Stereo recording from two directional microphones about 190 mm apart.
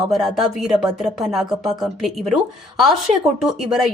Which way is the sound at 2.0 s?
Centre (ahead or behind).